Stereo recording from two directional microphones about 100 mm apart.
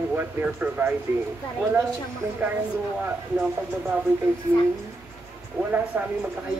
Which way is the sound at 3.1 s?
15° right (ahead or behind).